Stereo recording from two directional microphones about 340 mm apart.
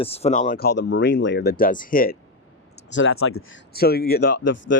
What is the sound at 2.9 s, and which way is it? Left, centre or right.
Speech, left.